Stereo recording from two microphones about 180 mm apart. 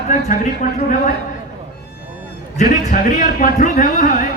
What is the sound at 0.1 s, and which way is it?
A man's voice, 45° left (ahead or behind).